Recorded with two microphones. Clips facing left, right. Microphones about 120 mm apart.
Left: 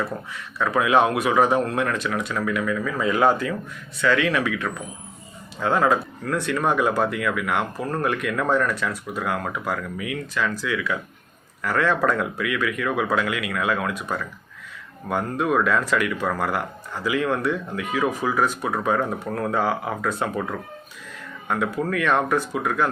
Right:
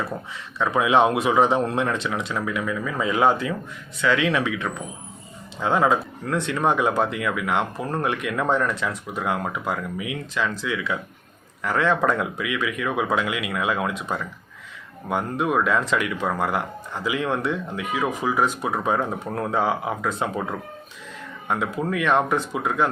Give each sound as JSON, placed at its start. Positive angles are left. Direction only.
{"t": 0.6, "sound": "speech", "side_deg": -20}